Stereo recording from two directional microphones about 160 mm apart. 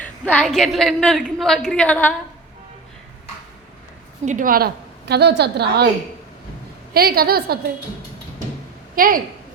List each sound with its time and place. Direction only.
0.0 s a woman's voice: 10° left (ahead or behind)
4.3 s a woman's voice: 60° right (ahead or behind); by 5.9 s 90° right
6.9 s a woman's voice: 75° right (ahead or behind)
9.0 s a woman's voice: 65° right (ahead or behind)